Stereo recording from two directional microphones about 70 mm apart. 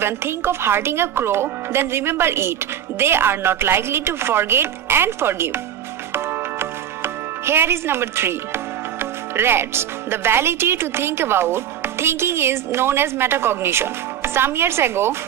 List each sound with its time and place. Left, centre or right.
0.0 s speech: right